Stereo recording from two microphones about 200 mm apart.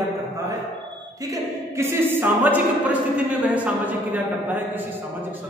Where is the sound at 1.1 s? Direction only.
15° right (ahead or behind).